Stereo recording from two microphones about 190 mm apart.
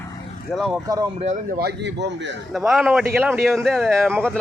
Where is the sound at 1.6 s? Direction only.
65° right (ahead or behind).